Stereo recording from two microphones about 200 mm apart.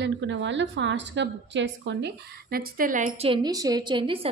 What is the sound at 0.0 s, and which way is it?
A woman's voice, 65° right (ahead or behind).